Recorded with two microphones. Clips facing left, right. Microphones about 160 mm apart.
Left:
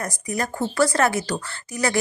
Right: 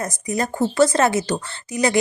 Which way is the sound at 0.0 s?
20° right (ahead or behind).